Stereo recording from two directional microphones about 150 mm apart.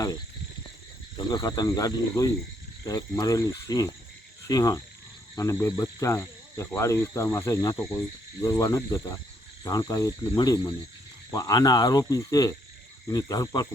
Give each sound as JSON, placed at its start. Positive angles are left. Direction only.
{"t": 1.1, "sound": "cricket", "side_deg": 25}
{"t": 10.3, "sound": "speech", "side_deg": 30}
{"t": 11.3, "sound": "cricket", "side_deg": 25}